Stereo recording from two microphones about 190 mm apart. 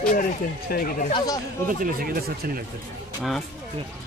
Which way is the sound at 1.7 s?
50° right (ahead or behind).